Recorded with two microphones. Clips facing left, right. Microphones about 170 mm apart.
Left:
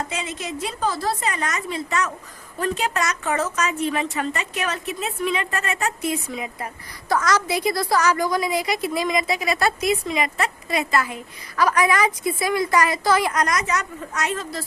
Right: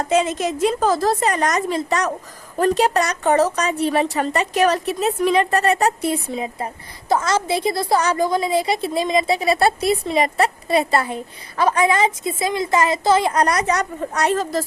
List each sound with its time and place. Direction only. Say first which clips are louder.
0.1 s a woman's voice: right 11 dB; 40° right (ahead or behind)